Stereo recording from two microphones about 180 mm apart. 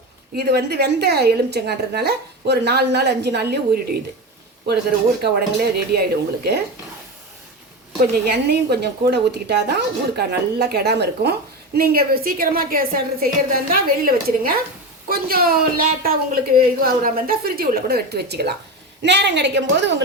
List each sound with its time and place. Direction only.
0.3 s a woman's voice: 60° right (ahead or behind)
5.7 s a woman's voice: 60° right (ahead or behind)
8.2 s a woman's voice: 65° right (ahead or behind)